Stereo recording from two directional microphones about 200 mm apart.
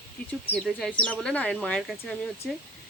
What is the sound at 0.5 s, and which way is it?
Speech, 5° left (ahead or behind).